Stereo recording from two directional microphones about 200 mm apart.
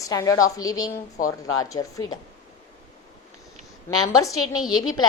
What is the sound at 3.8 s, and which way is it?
Speech, 15° left (ahead or behind).